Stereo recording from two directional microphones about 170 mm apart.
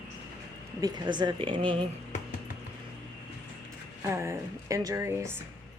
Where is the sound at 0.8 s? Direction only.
25° right (ahead or behind).